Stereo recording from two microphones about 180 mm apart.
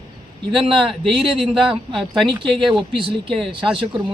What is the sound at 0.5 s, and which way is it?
Speech, 30° right (ahead or behind).